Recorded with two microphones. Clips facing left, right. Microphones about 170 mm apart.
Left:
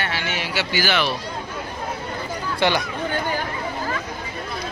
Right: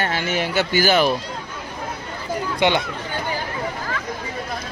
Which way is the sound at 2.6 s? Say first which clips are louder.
Right 1 dB; 20° right (ahead or behind).